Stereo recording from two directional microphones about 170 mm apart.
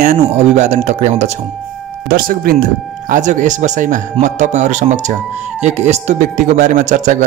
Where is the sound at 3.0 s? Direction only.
45° right (ahead or behind).